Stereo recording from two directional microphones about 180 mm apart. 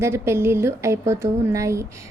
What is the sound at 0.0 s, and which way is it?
A woman's voice, 15° right (ahead or behind).